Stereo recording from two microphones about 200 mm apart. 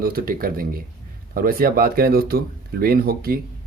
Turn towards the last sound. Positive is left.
turn(degrees=-50)  # may be behind; listen again after turning